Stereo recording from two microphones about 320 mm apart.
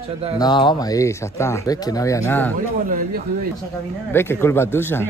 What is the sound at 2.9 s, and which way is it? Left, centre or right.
Speech, right.